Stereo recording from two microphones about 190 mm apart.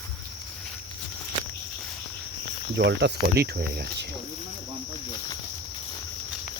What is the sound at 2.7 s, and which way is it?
Speech, 60° right (ahead or behind).